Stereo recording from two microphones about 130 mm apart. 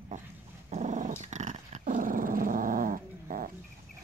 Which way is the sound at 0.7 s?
65° right (ahead or behind).